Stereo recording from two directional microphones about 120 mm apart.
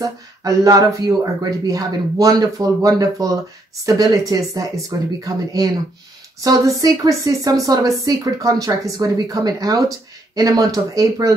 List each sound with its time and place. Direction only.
0.0 s speech: 30° right (ahead or behind)